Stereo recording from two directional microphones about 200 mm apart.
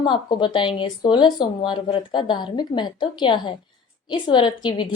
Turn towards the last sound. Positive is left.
turn(degrees=25)  # may be behind; listen again after turning